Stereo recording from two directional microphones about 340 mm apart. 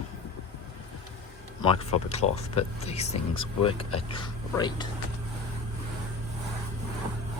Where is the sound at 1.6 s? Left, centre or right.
Centre.